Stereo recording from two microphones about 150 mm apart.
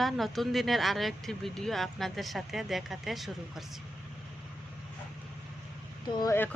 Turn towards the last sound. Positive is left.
turn(degrees=25)  # may be behind; listen again after turning